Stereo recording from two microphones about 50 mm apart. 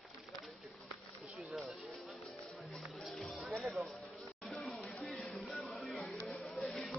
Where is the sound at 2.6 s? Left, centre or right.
Centre.